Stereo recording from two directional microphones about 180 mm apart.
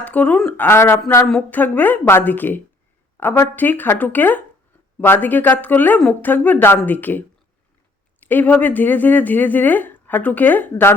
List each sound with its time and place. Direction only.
0.0 s speech: 10° left (ahead or behind)